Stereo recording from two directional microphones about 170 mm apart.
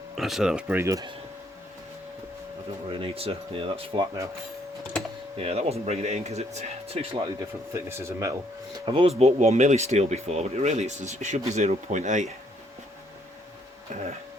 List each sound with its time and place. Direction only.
0.2 s speech: centre (ahead or behind); by 1.1 s 20° right (ahead or behind)
2.9 s speech: 35° right (ahead or behind)
5.4 s speech: 35° right (ahead or behind)
7.3 s speech: 15° right (ahead or behind)
8.8 s speech: 30° right (ahead or behind)